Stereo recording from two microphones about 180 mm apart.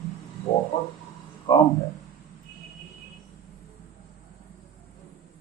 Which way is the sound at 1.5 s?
20° left (ahead or behind).